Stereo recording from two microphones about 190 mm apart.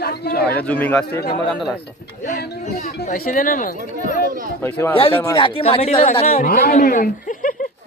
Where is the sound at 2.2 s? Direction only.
55° left (ahead or behind).